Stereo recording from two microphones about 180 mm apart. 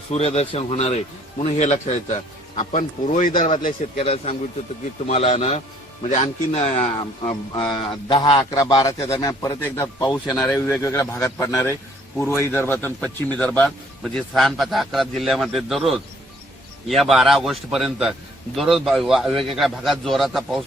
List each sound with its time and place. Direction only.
0.1 s a man's voice: 35° left (ahead or behind)
3.9 s a man's voice: 35° left (ahead or behind)
7.3 s a man's voice: 25° left (ahead or behind); by 20.7 s centre (ahead or behind)